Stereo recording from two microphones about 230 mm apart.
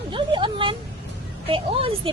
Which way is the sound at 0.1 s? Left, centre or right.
Right.